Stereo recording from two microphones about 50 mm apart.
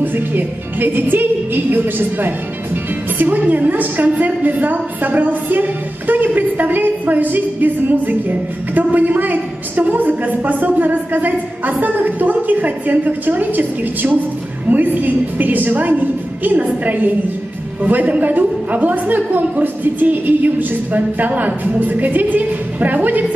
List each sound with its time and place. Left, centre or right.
0.0 s a woman's voice: right